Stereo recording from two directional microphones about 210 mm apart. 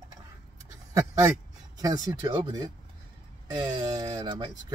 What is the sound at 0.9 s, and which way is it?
Speech, 15° right (ahead or behind).